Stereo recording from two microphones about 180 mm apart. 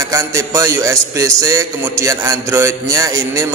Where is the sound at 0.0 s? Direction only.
15° right (ahead or behind).